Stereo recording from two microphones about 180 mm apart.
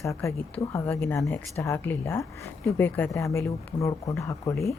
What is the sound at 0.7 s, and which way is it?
Speech, 15° left (ahead or behind).